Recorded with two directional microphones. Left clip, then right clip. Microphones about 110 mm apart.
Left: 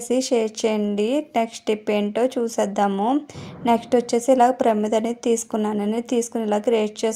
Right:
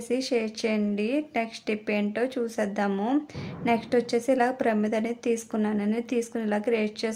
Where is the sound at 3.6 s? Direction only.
45° left (ahead or behind).